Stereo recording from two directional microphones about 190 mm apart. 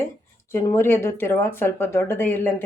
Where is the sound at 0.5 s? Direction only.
15° left (ahead or behind).